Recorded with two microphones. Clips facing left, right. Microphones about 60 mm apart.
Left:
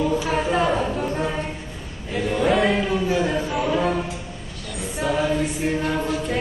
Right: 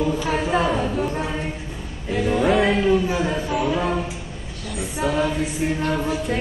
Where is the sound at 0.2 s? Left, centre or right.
Centre.